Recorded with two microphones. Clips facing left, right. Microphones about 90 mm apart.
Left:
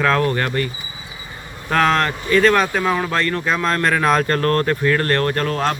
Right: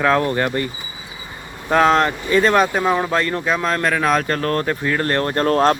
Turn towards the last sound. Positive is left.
turn(degrees=-35)  # may be behind; listen again after turning